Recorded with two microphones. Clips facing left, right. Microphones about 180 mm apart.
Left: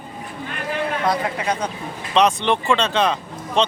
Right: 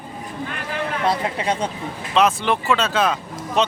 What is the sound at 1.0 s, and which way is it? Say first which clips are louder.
Speech: right 2 dB; 30° right (ahead or behind).